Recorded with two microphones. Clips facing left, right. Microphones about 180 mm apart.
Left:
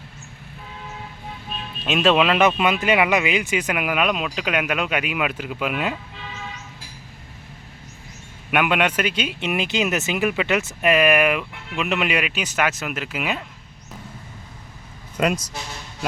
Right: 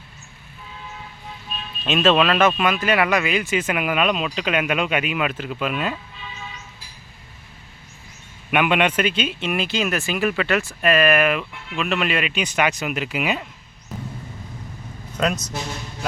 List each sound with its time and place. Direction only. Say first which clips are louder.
1.8 s speech: even; 10° left (ahead or behind)
3.7 s speech: right 1 dB; 5° left (ahead or behind)
8.4 s speech: right 1 dB; 5° left (ahead or behind)
15.2 s speech: left 1 dB; 10° left (ahead or behind)